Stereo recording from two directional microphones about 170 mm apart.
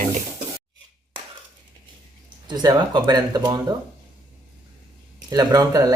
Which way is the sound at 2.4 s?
25° right (ahead or behind).